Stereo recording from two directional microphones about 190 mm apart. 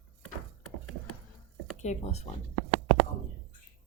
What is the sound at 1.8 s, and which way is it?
Speech, 35° left (ahead or behind).